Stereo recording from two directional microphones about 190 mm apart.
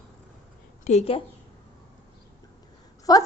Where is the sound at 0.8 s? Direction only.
35° left (ahead or behind).